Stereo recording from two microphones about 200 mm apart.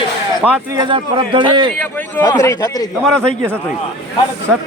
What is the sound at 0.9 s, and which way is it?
Speech, 25° right (ahead or behind).